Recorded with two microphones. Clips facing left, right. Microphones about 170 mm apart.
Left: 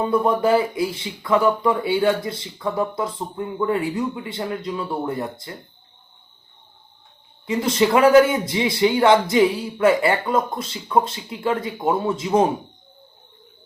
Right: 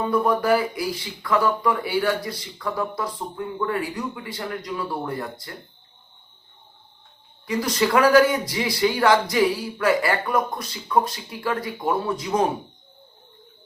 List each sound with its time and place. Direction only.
0.0 s speech: 25° left (ahead or behind)
7.4 s speech: 25° left (ahead or behind)